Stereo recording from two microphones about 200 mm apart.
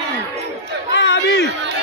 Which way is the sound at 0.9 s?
65° left (ahead or behind).